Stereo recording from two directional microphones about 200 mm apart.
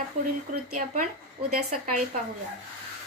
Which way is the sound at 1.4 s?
35° right (ahead or behind).